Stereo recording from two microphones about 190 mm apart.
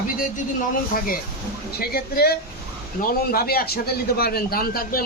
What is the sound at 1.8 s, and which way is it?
A man's voice, 55° left (ahead or behind).